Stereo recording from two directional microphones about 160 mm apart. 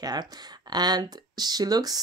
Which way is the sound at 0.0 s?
25° right (ahead or behind).